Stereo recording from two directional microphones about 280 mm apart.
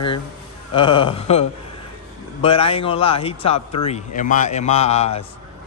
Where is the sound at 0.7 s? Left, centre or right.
Centre.